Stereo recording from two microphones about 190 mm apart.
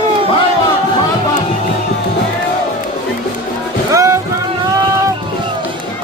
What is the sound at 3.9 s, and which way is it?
Music, 15° right (ahead or behind).